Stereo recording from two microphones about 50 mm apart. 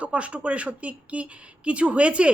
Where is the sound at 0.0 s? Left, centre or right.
Right.